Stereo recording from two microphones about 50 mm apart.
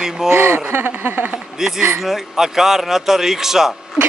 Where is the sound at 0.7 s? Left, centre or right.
Right.